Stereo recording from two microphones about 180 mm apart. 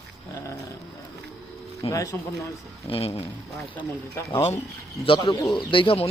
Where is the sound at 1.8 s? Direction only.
20° left (ahead or behind).